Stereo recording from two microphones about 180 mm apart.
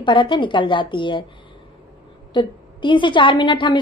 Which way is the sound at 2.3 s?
25° left (ahead or behind).